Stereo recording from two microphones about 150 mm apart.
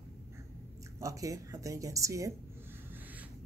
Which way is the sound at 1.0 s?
20° right (ahead or behind).